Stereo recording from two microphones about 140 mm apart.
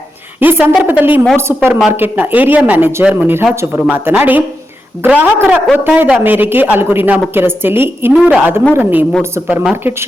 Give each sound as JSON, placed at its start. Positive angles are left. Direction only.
{"t": 0.3, "sound": "a woman's voice", "side_deg": -15}